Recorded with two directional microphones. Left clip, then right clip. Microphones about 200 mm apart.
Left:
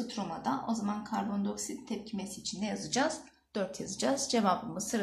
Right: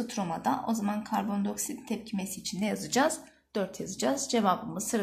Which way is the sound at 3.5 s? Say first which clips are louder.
Right 3 dB; 25° right (ahead or behind).